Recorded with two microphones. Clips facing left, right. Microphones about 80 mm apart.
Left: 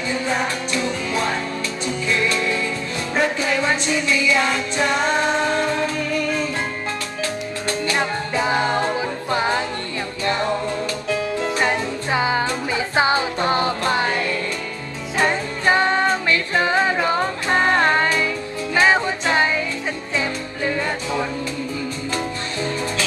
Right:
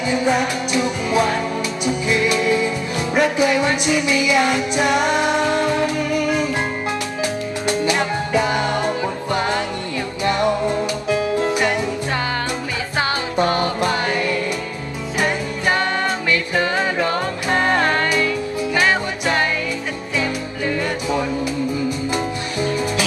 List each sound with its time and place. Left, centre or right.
0.1 s music: centre
7.6 s music: centre
8.4 s music: left
10.4 s music: centre
12.1 s music: centre
15.2 s music: left
20.2 s music: centre
21.8 s music: centre